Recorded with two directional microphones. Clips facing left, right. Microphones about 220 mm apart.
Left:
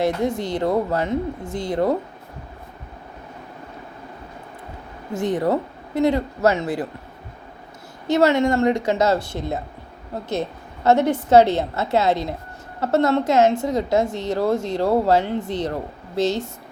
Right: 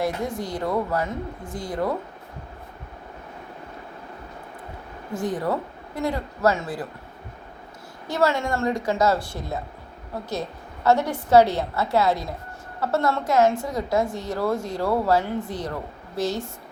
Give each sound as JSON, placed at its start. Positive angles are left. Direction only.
{"t": 0.0, "sound": "a woman's voice", "side_deg": 25}
{"t": 5.2, "sound": "a woman's voice", "side_deg": 20}
{"t": 8.0, "sound": "a woman's voice", "side_deg": 20}
{"t": 10.8, "sound": "a woman's voice", "side_deg": 20}